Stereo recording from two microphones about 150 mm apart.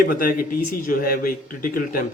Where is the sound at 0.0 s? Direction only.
70° left (ahead or behind).